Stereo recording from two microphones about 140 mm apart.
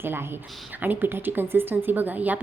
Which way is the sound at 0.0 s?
15° right (ahead or behind).